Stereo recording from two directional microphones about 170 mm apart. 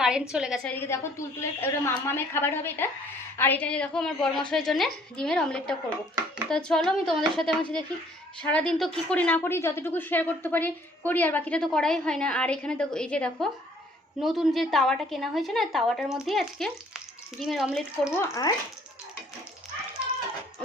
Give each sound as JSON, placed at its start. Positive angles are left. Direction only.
{"t": 0.0, "sound": "a woman's voice", "side_deg": -5}
{"t": 0.6, "sound": "a woman's voice", "side_deg": 10}
{"t": 18.2, "sound": "speech", "side_deg": 20}